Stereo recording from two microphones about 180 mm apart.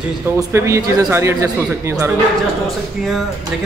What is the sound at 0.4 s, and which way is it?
A man's voice, 15° right (ahead or behind).